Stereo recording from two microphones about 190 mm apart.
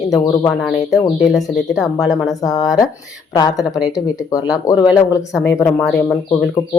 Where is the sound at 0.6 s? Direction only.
Centre (ahead or behind).